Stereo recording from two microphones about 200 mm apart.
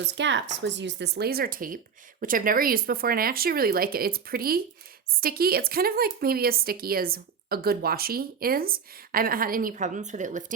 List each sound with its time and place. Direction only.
0.0 s a woman's voice: 65° right (ahead or behind); by 10.4 s 40° right (ahead or behind)